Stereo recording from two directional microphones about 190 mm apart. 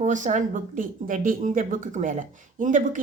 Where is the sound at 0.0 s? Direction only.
40° right (ahead or behind).